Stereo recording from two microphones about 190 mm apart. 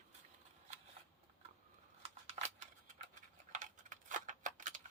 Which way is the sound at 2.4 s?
30° right (ahead or behind).